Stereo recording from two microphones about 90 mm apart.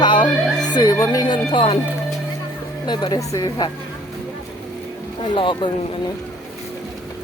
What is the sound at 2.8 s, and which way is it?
Speech, 55° left (ahead or behind).